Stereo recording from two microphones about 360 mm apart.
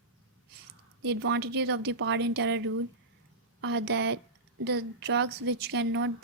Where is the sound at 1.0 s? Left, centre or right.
Right.